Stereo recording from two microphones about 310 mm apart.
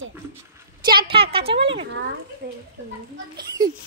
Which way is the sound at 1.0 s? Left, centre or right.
Centre.